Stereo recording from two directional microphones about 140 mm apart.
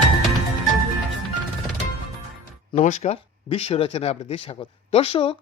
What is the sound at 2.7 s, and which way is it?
Speech, 60° left (ahead or behind).